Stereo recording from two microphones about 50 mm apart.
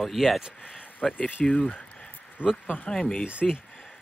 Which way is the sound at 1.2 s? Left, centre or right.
Left.